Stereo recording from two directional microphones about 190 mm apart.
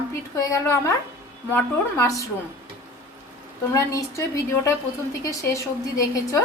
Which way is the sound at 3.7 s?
15° left (ahead or behind).